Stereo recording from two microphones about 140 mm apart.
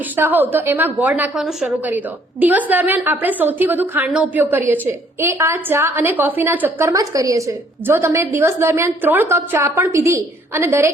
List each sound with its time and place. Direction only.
0.2 s a woman's voice: 15° right (ahead or behind)